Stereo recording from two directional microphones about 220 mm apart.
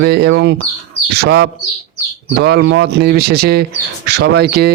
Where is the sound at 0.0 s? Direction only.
50° right (ahead or behind).